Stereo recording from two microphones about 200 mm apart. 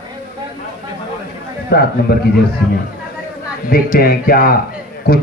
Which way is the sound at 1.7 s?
55° left (ahead or behind).